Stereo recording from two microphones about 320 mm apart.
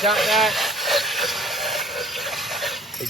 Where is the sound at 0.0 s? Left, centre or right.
Centre.